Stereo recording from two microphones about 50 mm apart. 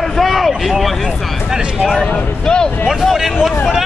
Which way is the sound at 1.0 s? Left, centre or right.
Centre.